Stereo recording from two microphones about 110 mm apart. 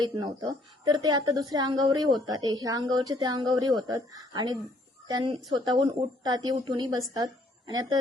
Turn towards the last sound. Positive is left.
turn(degrees=-40)  # may be behind; listen again after turning